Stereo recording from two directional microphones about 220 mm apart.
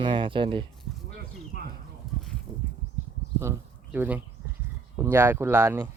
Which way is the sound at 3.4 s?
10° right (ahead or behind).